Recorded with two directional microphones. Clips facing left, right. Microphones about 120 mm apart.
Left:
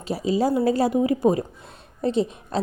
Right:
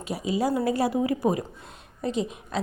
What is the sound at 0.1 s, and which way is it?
A woman's voice, 30° left (ahead or behind).